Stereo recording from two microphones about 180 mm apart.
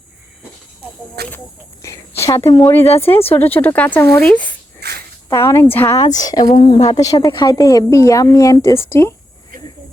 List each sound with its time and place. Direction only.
1.2 s speech: 65° right (ahead or behind)
1.8 s a woman's voice: 15° left (ahead or behind)
4.8 s cricket: 65° right (ahead or behind)
5.3 s a woman's voice: 15° left (ahead or behind)